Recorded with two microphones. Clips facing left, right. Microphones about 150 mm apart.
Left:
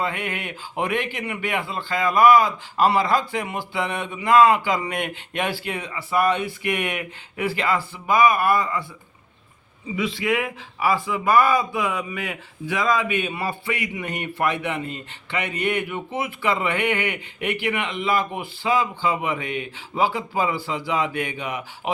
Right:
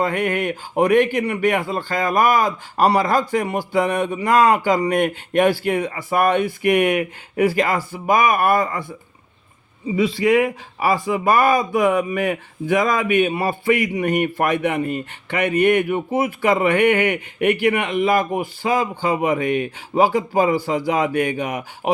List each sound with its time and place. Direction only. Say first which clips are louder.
0.0 s speech: right 7 dB; 45° right (ahead or behind)
9.9 s speech: right 7 dB; 40° right (ahead or behind)